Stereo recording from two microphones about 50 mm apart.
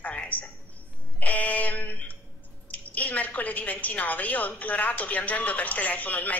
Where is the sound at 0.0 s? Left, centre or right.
Left.